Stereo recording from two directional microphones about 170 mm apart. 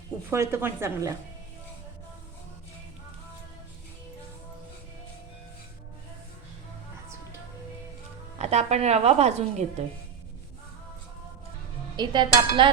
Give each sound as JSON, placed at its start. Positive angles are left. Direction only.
{"t": 0.3, "sound": "speech", "side_deg": -15}
{"t": 8.4, "sound": "a woman's voice", "side_deg": -40}
{"t": 11.9, "sound": "a sound", "side_deg": -25}